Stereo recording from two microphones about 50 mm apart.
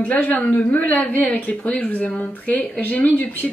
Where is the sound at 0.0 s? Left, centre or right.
Left.